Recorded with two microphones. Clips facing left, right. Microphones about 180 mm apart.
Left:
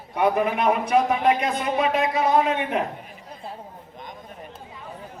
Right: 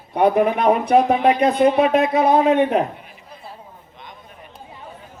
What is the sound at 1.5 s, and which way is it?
Speech, 60° right (ahead or behind).